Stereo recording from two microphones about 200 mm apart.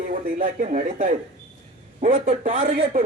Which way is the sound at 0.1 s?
45° right (ahead or behind).